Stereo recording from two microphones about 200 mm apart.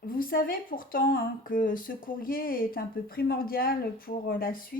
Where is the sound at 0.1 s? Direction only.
45° left (ahead or behind).